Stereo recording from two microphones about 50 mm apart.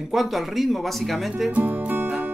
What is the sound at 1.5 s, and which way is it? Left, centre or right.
Speech, right.